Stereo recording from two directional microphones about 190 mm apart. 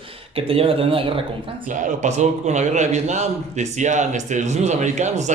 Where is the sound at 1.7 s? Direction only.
40° right (ahead or behind).